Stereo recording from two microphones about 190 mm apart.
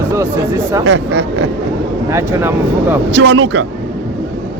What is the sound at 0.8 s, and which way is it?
Speech, 65° right (ahead or behind).